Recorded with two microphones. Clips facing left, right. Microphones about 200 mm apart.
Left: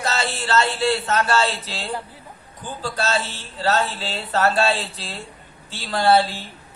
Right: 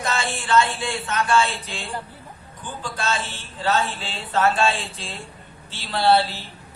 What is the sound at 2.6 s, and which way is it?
A man's voice, 40° left (ahead or behind).